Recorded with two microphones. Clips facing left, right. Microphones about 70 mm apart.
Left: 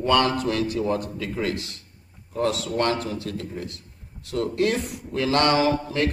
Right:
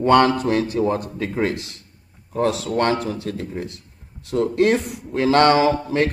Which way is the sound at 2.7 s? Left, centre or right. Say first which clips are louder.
Right 4 dB; right.